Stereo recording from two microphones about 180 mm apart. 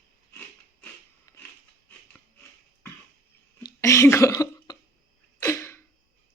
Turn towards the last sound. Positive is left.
turn(degrees=15)  # may be behind; listen again after turning